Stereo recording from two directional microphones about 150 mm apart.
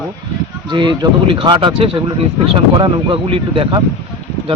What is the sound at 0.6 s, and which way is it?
Speech, 30° right (ahead or behind).